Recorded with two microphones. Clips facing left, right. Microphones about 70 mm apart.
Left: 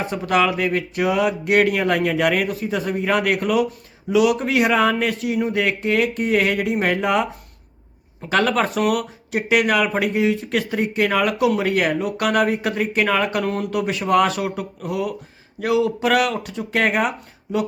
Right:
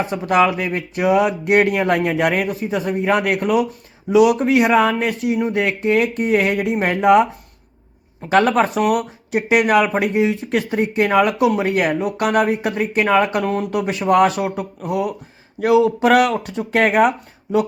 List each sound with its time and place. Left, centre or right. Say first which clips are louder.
0.1 s speech: right 2 dB; right
8.3 s speech: right 4 dB; right
13.4 s speech: right 3 dB; centre
13.7 s speech: right 3 dB; right